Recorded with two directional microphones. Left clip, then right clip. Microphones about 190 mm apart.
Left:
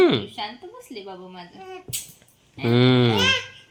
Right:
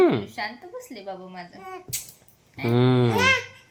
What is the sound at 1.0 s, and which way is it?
Speech, 20° right (ahead or behind).